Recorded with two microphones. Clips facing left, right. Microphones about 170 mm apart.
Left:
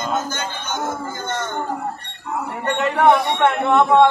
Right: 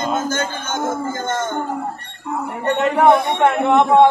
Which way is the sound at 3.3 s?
20° right (ahead or behind).